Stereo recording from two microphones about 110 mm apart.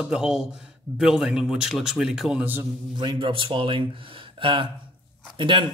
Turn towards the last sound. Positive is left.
turn(degrees=-50)  # may be behind; listen again after turning